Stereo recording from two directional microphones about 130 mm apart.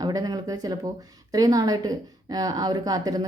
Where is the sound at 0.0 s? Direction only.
30° right (ahead or behind).